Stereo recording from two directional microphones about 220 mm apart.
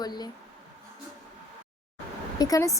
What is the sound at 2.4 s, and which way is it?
Speech, 15° left (ahead or behind).